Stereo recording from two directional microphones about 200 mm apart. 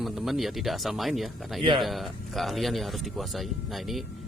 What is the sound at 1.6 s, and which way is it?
Speech, 25° right (ahead or behind).